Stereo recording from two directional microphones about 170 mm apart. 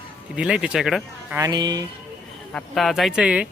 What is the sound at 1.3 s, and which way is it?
Speech, 20° right (ahead or behind).